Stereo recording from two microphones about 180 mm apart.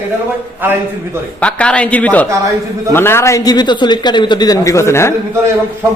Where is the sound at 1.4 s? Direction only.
5° left (ahead or behind).